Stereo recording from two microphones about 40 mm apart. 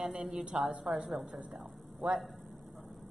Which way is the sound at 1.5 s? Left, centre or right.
Centre.